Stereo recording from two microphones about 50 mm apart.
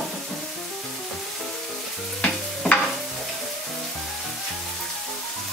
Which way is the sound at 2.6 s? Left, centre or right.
Centre.